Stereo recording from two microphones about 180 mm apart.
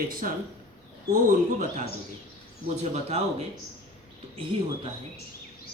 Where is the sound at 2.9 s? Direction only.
35° right (ahead or behind).